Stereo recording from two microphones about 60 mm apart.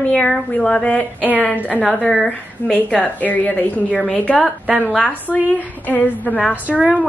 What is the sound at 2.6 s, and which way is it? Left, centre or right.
A woman's voice, left.